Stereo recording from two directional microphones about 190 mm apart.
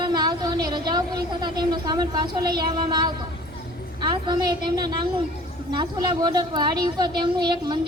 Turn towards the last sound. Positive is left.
turn(degrees=-25)  # may be behind; listen again after turning